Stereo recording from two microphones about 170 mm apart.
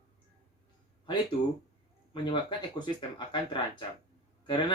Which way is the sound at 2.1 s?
25° left (ahead or behind).